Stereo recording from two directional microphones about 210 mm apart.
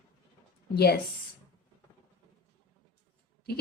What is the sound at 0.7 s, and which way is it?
Speech, 50° left (ahead or behind).